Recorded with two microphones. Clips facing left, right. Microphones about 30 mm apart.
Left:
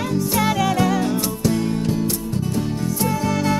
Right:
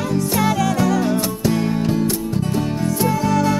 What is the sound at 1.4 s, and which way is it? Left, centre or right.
Music, centre.